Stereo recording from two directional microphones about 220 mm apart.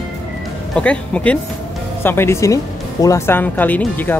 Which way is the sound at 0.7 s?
5° left (ahead or behind).